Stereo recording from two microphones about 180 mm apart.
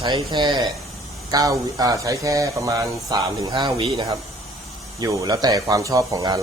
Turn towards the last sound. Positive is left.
turn(degrees=-20)  # may be behind; listen again after turning